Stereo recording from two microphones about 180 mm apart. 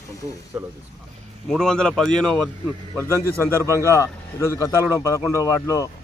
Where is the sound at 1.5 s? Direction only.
5° left (ahead or behind).